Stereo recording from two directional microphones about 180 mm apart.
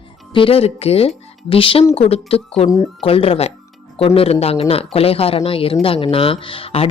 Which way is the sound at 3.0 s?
30° left (ahead or behind).